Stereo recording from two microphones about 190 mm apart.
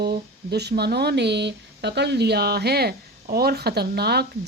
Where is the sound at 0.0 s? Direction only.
60° right (ahead or behind).